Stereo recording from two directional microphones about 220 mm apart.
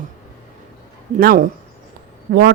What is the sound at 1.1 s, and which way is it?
Speech, 40° right (ahead or behind).